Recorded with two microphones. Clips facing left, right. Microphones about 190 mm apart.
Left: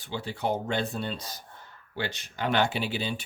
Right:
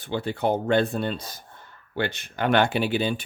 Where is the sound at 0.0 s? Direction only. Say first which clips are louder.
Right 6 dB; 55° right (ahead or behind).